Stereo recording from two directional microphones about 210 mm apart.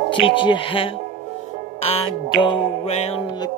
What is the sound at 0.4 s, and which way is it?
Music, 25° left (ahead or behind).